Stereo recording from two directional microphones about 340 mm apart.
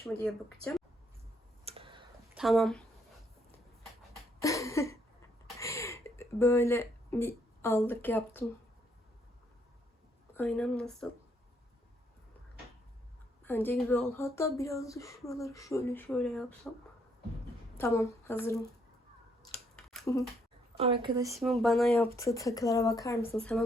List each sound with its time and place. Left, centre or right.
0.0 s speech: centre
1.6 s tick-tock: centre
2.3 s speech: centre
4.4 s speech: centre
5.5 s a sound: centre
10.3 s speech: centre
13.4 s speech: centre
17.7 s speech: centre
19.5 s a sound: centre
20.7 s speech: centre